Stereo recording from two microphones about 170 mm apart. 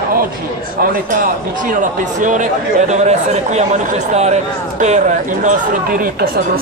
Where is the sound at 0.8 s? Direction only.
60° right (ahead or behind).